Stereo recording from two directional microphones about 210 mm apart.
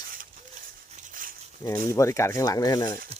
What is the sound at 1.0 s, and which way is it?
Dog, 40° right (ahead or behind).